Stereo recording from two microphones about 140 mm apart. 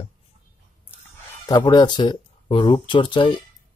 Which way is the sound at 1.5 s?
30° left (ahead or behind).